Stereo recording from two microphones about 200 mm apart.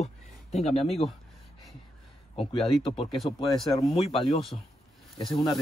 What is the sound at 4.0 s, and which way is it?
Speech, 30° left (ahead or behind).